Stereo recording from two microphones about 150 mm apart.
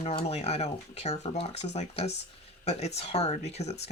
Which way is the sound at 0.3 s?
45° left (ahead or behind).